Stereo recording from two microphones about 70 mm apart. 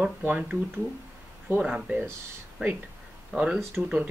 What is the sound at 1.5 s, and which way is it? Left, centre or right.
Speech, centre.